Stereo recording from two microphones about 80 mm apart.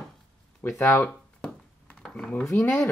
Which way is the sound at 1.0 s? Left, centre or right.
Centre.